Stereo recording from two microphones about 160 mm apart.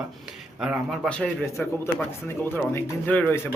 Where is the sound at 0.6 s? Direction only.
5° right (ahead or behind).